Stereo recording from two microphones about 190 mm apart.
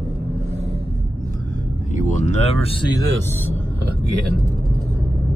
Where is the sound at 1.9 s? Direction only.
40° left (ahead or behind).